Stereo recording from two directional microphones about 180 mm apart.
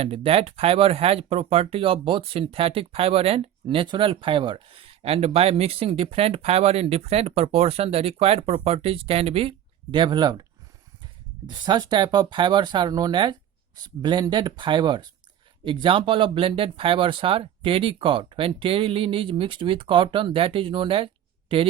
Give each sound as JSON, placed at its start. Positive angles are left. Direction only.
{"t": 0.0, "sound": "speech", "side_deg": -30}
{"t": 11.4, "sound": "speech", "side_deg": -25}